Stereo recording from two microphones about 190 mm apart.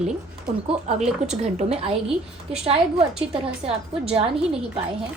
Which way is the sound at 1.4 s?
35° right (ahead or behind).